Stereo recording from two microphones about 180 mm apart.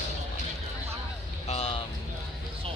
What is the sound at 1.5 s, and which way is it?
Speech, 35° left (ahead or behind).